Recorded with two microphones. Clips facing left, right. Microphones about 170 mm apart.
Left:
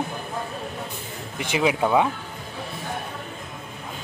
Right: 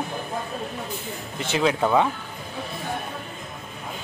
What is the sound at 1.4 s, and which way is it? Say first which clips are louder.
Speech: even; 10° left (ahead or behind).